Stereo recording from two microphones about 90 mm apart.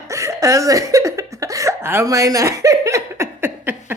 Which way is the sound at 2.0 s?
40° right (ahead or behind).